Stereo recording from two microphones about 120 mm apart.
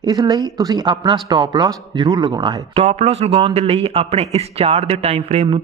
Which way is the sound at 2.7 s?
60° right (ahead or behind).